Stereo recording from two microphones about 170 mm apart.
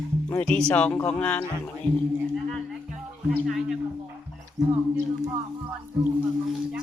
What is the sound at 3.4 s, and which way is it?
Speech, centre (ahead or behind).